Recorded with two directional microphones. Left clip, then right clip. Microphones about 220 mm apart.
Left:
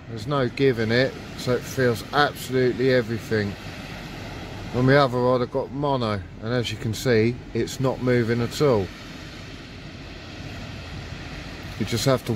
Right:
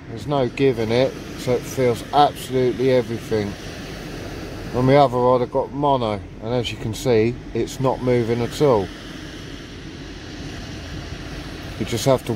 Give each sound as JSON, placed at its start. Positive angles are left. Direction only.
{"t": 0.3, "sound": "speech", "side_deg": 25}
{"t": 4.7, "sound": "speech", "side_deg": 30}
{"t": 11.9, "sound": "speech", "side_deg": 30}